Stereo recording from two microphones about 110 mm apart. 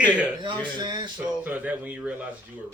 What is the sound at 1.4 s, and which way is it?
Speech, 15° right (ahead or behind).